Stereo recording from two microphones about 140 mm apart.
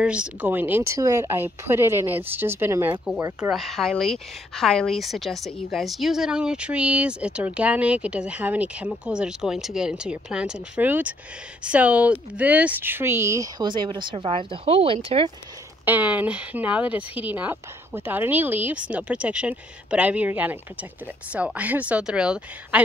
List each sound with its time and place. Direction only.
0.0 s speech: 10° right (ahead or behind)
3.3 s speech: 5° right (ahead or behind); by 15.3 s 40° right (ahead or behind)
15.8 s speech: 10° right (ahead or behind)